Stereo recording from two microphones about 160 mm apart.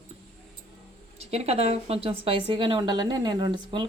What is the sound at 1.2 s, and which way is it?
A woman's voice, 40° right (ahead or behind).